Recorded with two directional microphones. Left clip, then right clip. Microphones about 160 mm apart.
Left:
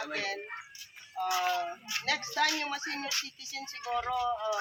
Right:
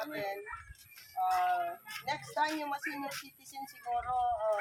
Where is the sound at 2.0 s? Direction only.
20° right (ahead or behind).